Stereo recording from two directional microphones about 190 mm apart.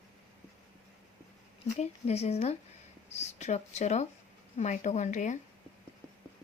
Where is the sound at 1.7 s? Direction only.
35° left (ahead or behind).